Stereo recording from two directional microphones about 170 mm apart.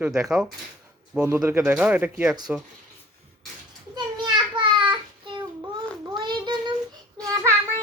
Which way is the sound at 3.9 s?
25° right (ahead or behind).